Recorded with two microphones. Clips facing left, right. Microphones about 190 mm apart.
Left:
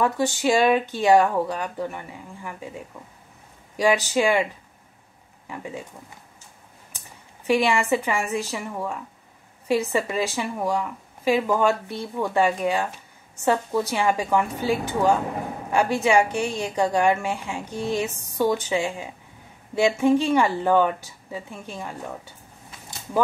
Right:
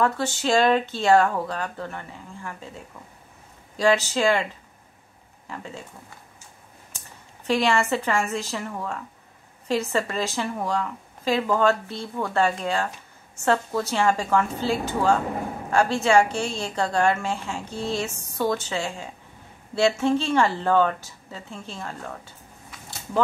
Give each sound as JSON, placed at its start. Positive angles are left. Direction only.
{"t": 0.0, "sound": "speech", "side_deg": 15}
{"t": 5.5, "sound": "speech", "side_deg": 15}
{"t": 7.4, "sound": "speech", "side_deg": 15}